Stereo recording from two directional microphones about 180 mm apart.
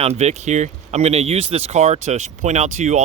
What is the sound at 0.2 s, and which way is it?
Speech, 40° right (ahead or behind).